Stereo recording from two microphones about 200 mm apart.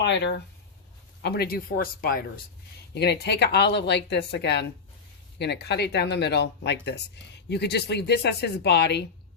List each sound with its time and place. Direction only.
0.0 s a woman's voice: 60° left (ahead or behind)